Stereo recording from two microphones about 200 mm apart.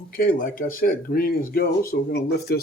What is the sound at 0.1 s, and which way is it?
Speech, 45° left (ahead or behind).